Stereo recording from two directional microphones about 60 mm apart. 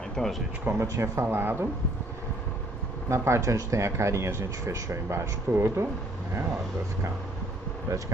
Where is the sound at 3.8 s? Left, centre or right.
Right.